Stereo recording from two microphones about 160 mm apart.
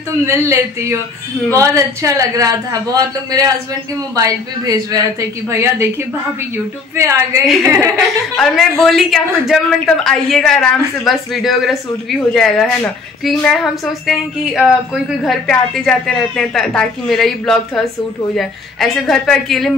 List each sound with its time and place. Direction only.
0.2 s a man's voice: 15° right (ahead or behind)
7.0 s speech: 15° right (ahead or behind)
7.4 s speech: centre (ahead or behind)